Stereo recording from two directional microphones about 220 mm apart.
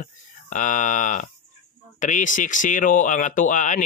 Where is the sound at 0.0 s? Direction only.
35° left (ahead or behind).